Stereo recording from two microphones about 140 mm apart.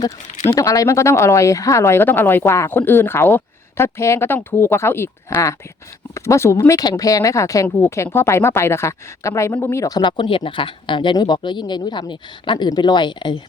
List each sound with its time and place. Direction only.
0.5 s speech: 25° left (ahead or behind)
10.0 s speech: 35° left (ahead or behind)